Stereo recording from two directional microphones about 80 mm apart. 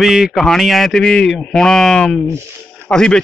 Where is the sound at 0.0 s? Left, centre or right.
Centre.